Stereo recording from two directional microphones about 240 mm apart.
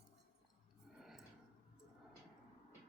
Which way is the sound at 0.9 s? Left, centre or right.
Centre.